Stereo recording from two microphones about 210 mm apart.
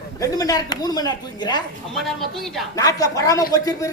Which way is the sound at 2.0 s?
Centre (ahead or behind).